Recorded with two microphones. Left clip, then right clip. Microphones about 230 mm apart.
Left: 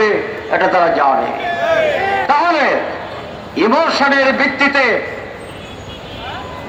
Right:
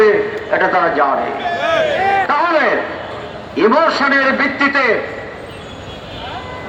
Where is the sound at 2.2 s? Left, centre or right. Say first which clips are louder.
Left 1 dB; left.